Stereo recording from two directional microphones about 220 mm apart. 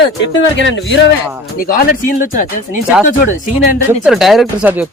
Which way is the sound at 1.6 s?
40° left (ahead or behind).